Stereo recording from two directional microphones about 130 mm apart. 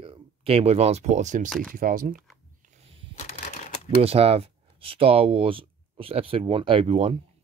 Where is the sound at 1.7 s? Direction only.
90° right.